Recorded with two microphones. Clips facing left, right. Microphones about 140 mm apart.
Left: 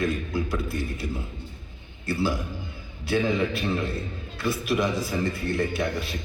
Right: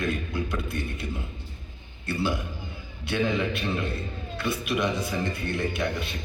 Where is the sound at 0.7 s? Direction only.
5° left (ahead or behind).